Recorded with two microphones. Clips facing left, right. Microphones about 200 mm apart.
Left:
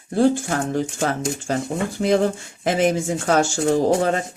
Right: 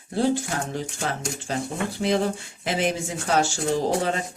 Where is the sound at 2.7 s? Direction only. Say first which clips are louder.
Left 6 dB; 50° left (ahead or behind).